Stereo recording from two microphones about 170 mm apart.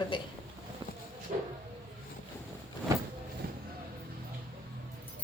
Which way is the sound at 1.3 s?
55° right (ahead or behind).